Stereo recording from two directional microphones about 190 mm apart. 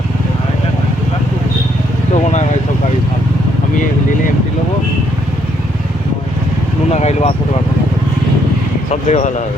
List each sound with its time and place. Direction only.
6.9 s speech: 35° left (ahead or behind)
8.9 s speech: 40° left (ahead or behind)